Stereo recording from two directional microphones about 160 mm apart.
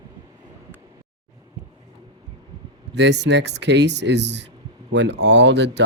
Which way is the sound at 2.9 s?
90° right.